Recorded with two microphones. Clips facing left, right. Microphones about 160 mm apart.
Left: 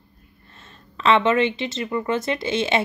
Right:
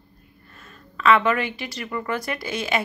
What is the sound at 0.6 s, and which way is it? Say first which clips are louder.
Speech: even; 25° left (ahead or behind).